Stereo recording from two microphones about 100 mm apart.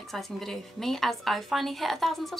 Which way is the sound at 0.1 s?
5° left (ahead or behind).